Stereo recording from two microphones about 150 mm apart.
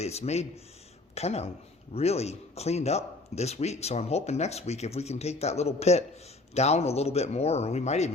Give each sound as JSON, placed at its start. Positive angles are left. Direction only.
{"t": 0.0, "sound": "speech", "side_deg": 45}